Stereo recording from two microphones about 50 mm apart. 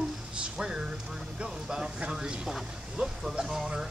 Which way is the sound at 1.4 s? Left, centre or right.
Centre.